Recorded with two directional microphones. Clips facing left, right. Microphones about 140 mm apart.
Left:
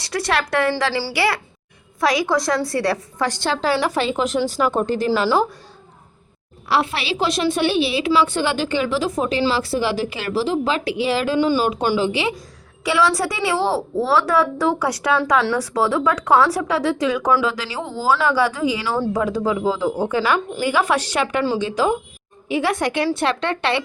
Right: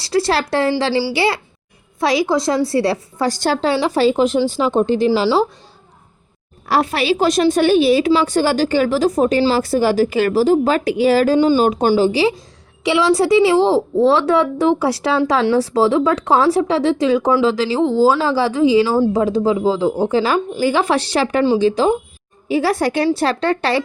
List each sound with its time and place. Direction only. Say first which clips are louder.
0.0 s a woman's voice: right 5 dB; 30° right (ahead or behind)
6.7 s a woman's voice: right 4 dB; 45° right (ahead or behind)
12.8 s a woman's voice: right 4 dB; 25° right (ahead or behind)